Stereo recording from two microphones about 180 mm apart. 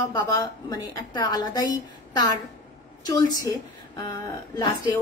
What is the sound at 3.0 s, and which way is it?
Speech, 20° left (ahead or behind).